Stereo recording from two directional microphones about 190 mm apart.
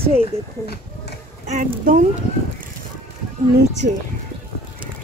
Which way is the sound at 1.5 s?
40° right (ahead or behind).